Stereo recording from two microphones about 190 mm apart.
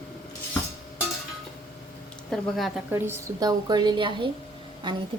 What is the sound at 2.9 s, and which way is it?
A woman's voice, 10° right (ahead or behind).